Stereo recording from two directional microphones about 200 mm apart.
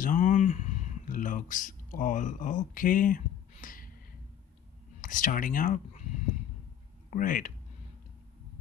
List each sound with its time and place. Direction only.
0.0 s speech: 40° left (ahead or behind)
3.6 s gasp: 45° left (ahead or behind)
5.0 s speech: 40° left (ahead or behind)
7.1 s speech: 40° left (ahead or behind)